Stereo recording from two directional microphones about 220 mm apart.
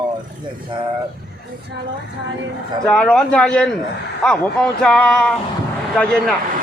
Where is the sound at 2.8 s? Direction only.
5° left (ahead or behind).